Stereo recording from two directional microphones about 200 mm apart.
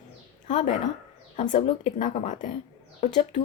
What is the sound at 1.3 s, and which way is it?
A woman's voice, 40° left (ahead or behind).